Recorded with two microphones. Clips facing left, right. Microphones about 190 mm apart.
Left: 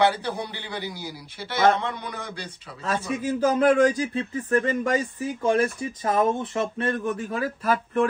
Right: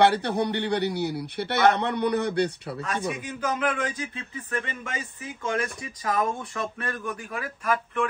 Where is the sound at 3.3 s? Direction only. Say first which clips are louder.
Left 10 dB; 35° left (ahead or behind).